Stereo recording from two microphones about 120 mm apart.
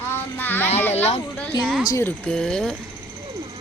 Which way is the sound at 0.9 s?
60° left (ahead or behind).